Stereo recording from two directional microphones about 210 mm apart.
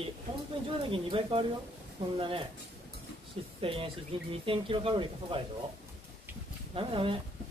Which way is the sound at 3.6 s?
25° right (ahead or behind).